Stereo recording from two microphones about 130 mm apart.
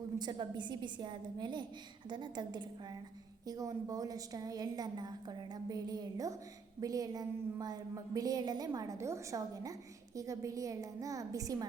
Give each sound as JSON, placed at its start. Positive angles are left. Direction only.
{"t": 0.2, "sound": "a woman's voice", "side_deg": -35}